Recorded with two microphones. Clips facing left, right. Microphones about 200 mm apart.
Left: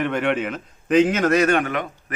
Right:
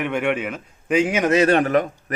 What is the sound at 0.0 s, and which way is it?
A man's voice, 10° right (ahead or behind).